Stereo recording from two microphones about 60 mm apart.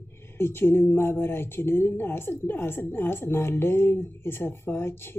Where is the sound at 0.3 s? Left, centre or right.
Left.